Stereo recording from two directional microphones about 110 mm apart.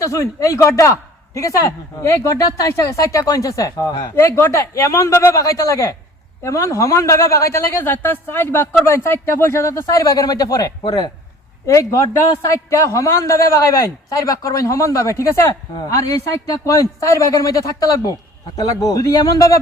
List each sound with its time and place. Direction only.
0.0 s a man's voice: 30° left (ahead or behind)